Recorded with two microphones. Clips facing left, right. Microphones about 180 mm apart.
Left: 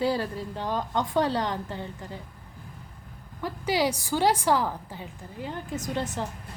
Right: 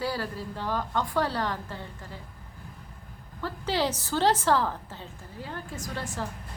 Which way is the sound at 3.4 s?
15° left (ahead or behind).